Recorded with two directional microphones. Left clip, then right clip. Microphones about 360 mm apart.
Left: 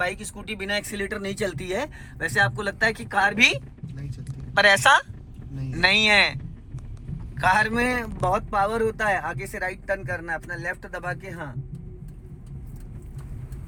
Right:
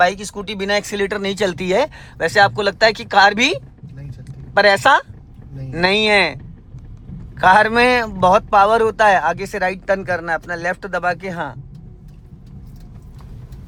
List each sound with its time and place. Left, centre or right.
0.0 s speech: centre